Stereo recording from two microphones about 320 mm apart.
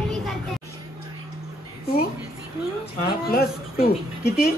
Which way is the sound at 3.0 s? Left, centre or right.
Left.